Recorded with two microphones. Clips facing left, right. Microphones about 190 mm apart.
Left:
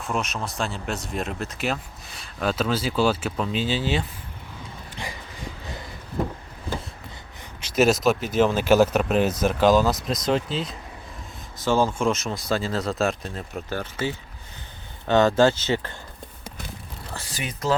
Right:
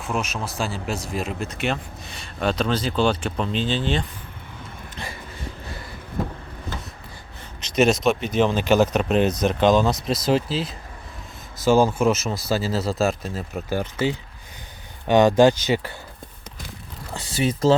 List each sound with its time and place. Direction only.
0.0 s speech: centre (ahead or behind)
4.9 s a sound: 15° left (ahead or behind)
7.6 s speech: 5° left (ahead or behind); by 16.0 s 10° right (ahead or behind)
17.2 s speech: 30° right (ahead or behind)